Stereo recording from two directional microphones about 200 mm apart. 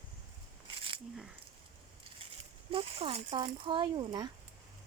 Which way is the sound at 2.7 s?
30° right (ahead or behind).